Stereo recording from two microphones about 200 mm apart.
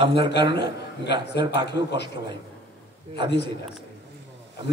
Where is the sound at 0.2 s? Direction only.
60° left (ahead or behind).